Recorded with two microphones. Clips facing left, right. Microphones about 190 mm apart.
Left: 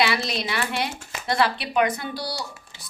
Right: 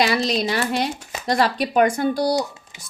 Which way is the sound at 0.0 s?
40° right (ahead or behind).